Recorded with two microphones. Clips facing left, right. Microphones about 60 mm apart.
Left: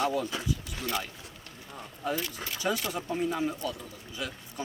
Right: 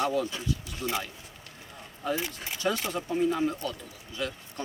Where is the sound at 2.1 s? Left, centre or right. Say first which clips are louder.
Right 1 dB; right.